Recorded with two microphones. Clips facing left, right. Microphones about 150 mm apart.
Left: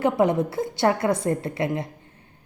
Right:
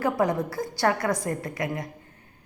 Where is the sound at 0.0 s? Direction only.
25° left (ahead or behind).